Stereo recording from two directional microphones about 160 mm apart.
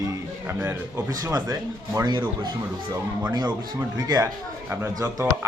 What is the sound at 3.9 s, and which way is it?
A man's voice, 25° right (ahead or behind).